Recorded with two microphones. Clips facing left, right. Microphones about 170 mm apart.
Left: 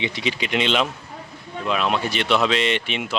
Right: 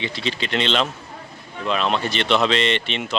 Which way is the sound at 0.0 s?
15° left (ahead or behind).